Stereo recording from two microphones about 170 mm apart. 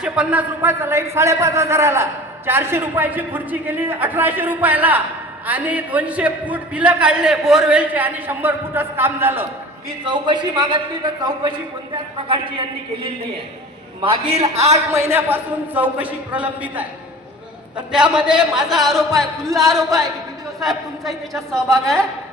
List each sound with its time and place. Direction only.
0.0 s a man's voice: 10° right (ahead or behind)
10.0 s a man's voice: 25° right (ahead or behind)
14.9 s a man's voice: 15° right (ahead or behind)
17.9 s speech: 5° right (ahead or behind)
20.6 s speech: centre (ahead or behind)